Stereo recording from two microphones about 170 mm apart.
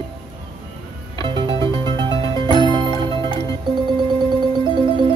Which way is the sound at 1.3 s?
25° right (ahead or behind).